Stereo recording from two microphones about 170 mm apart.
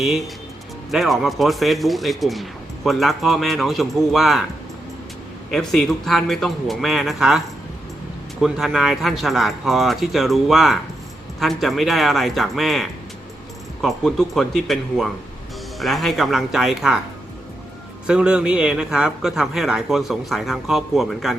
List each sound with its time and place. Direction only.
0.9 s speech: centre (ahead or behind)
5.5 s speech: centre (ahead or behind)
18.0 s speech: 5° right (ahead or behind)